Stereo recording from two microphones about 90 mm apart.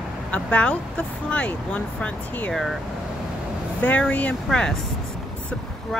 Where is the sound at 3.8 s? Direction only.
15° left (ahead or behind).